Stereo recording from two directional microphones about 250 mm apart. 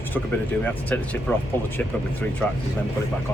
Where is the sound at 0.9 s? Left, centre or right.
Centre.